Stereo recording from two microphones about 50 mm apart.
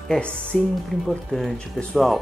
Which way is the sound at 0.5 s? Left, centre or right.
Centre.